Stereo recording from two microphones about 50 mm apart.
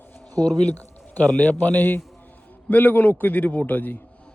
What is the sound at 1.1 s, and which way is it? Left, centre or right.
A man's voice, left.